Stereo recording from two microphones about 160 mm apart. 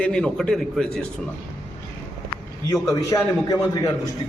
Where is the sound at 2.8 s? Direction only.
20° left (ahead or behind).